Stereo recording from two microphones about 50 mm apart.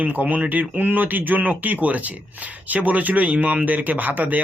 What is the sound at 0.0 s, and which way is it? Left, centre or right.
Speech, right.